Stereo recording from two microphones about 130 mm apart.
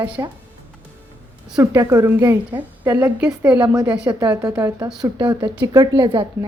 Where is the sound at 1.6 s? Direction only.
25° right (ahead or behind); by 4.1 s 10° right (ahead or behind).